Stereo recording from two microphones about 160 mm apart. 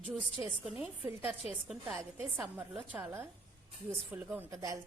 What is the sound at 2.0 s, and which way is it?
A woman's voice, 15° right (ahead or behind).